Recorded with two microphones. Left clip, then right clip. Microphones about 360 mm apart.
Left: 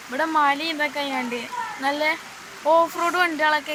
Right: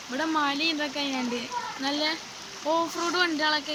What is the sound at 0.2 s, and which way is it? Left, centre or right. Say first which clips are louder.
Speech: left 6 dB; centre.